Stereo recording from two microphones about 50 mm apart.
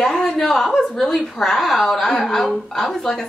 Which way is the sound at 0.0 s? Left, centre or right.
Centre.